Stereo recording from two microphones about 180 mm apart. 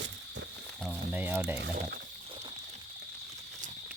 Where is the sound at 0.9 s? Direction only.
10° right (ahead or behind).